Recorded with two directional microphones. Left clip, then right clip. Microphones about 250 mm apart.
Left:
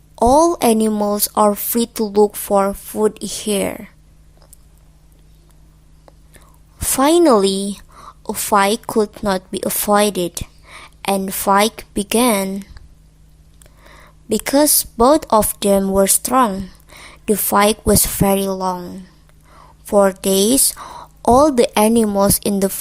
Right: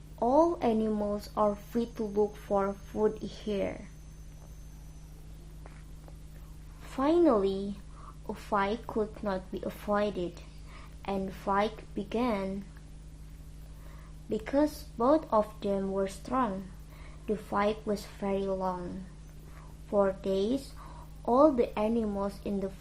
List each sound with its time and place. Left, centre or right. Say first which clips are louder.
0.2 s a woman's voice: left 13 dB; left
6.8 s a woman's voice: left 13 dB; left
13.8 s a woman's voice: left 15 dB; left